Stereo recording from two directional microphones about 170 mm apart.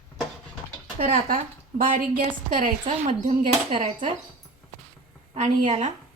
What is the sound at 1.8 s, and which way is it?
Speech, 55° right (ahead or behind).